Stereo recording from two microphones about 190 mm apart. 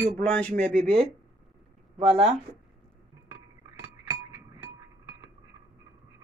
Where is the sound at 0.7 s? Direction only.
35° right (ahead or behind).